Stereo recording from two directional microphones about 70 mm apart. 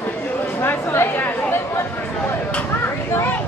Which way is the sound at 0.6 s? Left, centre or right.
Left.